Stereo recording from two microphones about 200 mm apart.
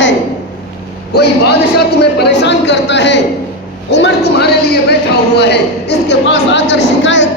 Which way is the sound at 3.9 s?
60° left (ahead or behind).